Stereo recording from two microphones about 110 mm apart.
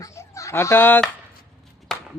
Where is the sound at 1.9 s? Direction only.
5° left (ahead or behind).